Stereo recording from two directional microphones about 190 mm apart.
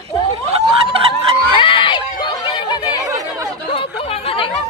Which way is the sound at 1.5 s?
25° left (ahead or behind).